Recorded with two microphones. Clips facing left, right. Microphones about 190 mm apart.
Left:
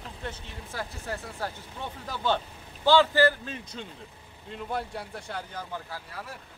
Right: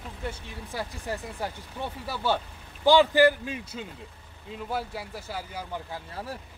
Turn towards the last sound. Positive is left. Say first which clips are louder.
# right 4 dB
turn(degrees=-25)  # may be behind; listen again after turning